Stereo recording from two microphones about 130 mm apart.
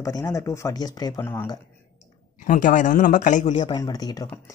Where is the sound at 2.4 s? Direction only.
90° left; by 3.6 s 70° left (ahead or behind).